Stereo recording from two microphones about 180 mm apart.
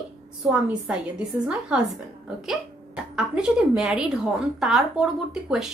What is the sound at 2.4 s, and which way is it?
A woman's voice, 5° right (ahead or behind).